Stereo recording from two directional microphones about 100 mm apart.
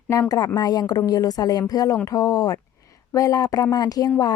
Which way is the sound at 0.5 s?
40° left (ahead or behind).